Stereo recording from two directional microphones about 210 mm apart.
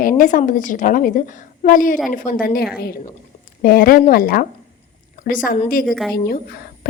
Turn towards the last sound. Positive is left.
turn(degrees=45)  # may be behind; listen again after turning